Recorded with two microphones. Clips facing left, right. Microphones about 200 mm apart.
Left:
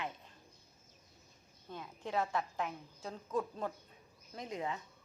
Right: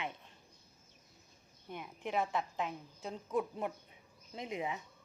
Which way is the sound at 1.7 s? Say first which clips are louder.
Right 1 dB; 20° right (ahead or behind).